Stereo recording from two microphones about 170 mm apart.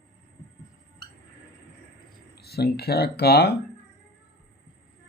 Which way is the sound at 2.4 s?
70° left (ahead or behind).